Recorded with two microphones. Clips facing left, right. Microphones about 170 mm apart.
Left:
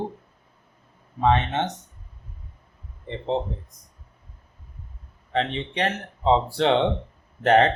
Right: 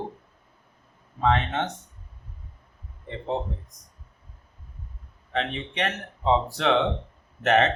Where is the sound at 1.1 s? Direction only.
20° left (ahead or behind).